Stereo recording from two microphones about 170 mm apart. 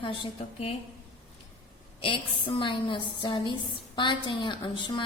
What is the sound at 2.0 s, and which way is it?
A woman's voice, 30° left (ahead or behind).